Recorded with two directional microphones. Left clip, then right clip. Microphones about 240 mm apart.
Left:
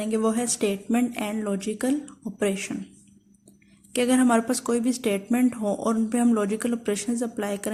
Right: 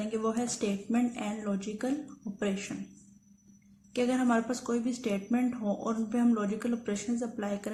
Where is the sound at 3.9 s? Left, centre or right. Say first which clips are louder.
Left 7 dB; left.